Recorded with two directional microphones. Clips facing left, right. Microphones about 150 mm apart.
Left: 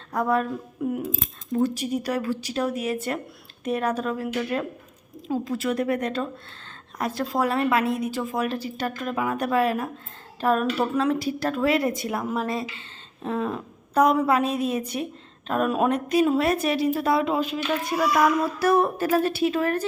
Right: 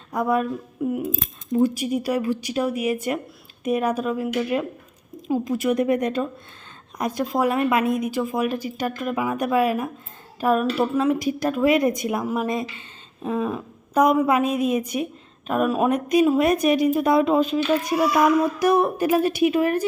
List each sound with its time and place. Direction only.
0.1 s speech: 10° right (ahead or behind)